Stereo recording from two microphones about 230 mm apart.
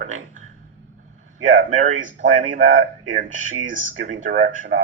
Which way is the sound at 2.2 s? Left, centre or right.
Right.